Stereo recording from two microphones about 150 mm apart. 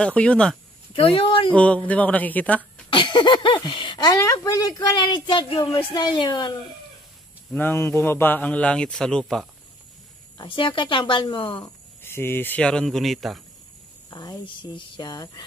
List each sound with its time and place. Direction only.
0.0 s a man's voice: 10° left (ahead or behind)
0.9 s speech: 40° left (ahead or behind)
1.5 s a man's voice: 10° left (ahead or behind)
2.9 s speech: 30° left (ahead or behind)
7.5 s a man's voice: 15° left (ahead or behind)
10.3 s speech: 30° left (ahead or behind)
12.0 s a man's voice: 15° left (ahead or behind)
14.1 s speech: 30° left (ahead or behind)